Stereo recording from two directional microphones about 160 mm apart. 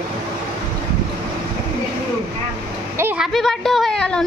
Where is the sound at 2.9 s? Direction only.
15° right (ahead or behind).